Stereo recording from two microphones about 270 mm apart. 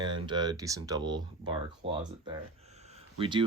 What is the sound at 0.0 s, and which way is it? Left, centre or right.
Speech, centre.